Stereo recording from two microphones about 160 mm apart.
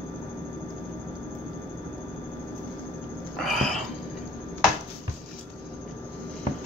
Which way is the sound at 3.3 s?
Centre (ahead or behind).